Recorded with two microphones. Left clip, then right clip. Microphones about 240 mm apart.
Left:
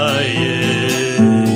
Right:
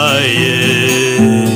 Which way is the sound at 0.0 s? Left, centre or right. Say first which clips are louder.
Right 5 dB; right.